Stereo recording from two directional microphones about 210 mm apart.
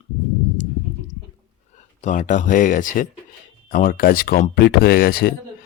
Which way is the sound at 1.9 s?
35° left (ahead or behind).